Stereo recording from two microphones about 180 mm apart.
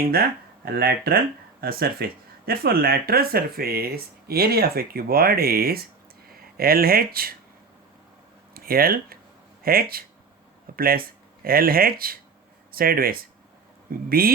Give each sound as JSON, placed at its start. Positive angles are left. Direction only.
{"t": 0.1, "sound": "speech", "side_deg": -55}
{"t": 8.5, "sound": "speech", "side_deg": -55}